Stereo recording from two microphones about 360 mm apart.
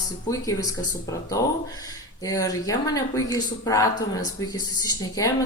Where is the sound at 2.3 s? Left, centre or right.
Centre.